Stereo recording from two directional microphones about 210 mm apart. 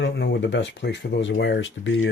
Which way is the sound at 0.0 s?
60° left (ahead or behind).